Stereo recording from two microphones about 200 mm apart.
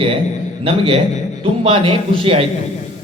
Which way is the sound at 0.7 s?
30° right (ahead or behind).